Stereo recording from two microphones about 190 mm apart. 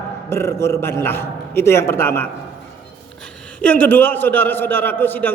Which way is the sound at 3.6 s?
10° left (ahead or behind).